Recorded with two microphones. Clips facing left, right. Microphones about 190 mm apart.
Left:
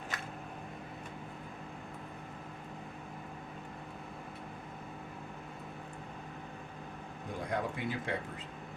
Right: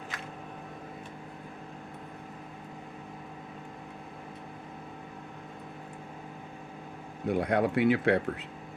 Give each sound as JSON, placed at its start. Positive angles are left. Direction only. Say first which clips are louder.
{"t": 7.3, "sound": "speech", "louder": "right 10 dB", "side_deg": -70}